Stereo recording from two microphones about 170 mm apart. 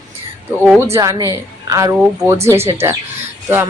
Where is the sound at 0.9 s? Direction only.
20° right (ahead or behind).